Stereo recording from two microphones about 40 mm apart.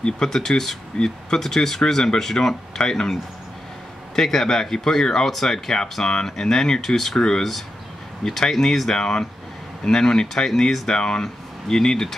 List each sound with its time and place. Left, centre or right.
0.0 s speech: centre
7.2 s speech: centre
8.3 s speech: centre